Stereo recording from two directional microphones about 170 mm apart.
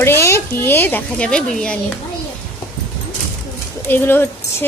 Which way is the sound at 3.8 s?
10° left (ahead or behind).